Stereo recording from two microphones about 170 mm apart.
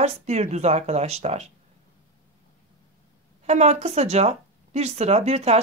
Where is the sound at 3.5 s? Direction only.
40° right (ahead or behind).